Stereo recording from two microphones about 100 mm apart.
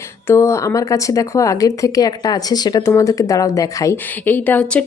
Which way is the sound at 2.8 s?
30° left (ahead or behind).